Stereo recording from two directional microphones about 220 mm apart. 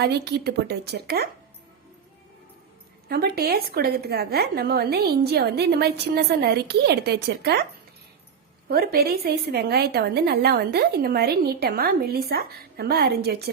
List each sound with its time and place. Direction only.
0.0 s a woman's voice: 45° right (ahead or behind)
3.1 s a woman's voice: 45° right (ahead or behind)
8.7 s a woman's voice: 45° right (ahead or behind)